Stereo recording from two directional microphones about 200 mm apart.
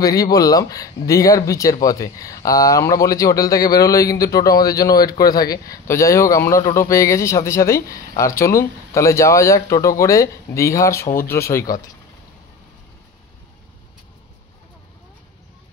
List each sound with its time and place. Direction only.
0.0 s speech: 20° left (ahead or behind)